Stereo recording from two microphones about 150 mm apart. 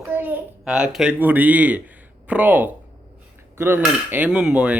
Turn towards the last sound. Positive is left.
turn(degrees=-10)  # may be behind; listen again after turning